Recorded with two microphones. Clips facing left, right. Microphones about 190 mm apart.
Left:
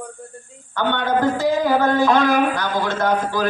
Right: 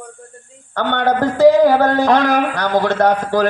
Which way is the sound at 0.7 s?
65° right (ahead or behind).